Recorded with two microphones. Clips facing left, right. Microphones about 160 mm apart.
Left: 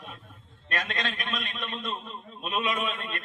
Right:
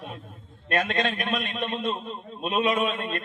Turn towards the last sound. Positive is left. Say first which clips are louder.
# right 6 dB
turn(degrees=-35)  # may be behind; listen again after turning